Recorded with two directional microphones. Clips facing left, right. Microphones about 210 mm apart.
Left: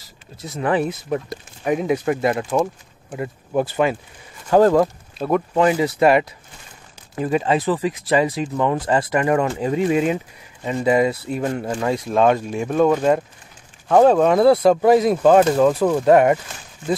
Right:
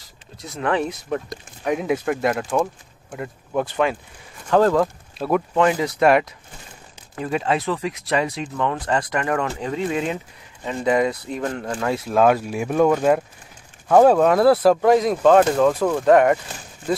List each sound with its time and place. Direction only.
0.4 s speech: 5° left (ahead or behind)
4.5 s speech: 15° left (ahead or behind)
5.2 s speech: centre (ahead or behind)
11.9 s speech: 5° right (ahead or behind)